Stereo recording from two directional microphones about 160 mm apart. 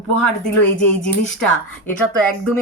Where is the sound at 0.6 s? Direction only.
5° left (ahead or behind).